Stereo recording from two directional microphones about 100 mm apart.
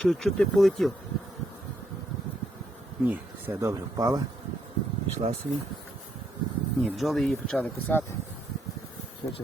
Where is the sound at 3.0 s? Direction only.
20° right (ahead or behind); by 4.2 s 35° right (ahead or behind).